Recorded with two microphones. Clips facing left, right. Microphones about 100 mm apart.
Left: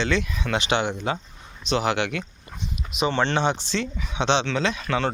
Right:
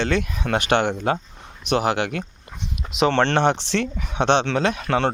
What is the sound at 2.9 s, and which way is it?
Speech, 85° right.